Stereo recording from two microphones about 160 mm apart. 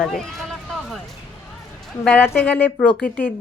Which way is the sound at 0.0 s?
Centre (ahead or behind).